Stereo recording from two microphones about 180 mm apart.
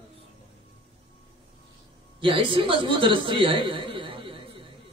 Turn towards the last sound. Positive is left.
turn(degrees=-30)  # may be behind; listen again after turning